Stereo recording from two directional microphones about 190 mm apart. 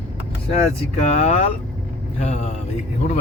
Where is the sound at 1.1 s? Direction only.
35° left (ahead or behind).